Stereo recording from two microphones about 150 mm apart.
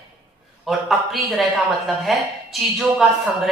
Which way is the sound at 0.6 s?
Centre (ahead or behind).